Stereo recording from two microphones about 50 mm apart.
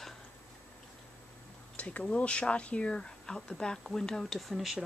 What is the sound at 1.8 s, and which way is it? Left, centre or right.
Speech, left.